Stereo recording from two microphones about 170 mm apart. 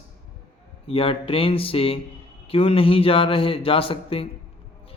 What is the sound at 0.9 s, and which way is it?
A man's voice, 35° left (ahead or behind).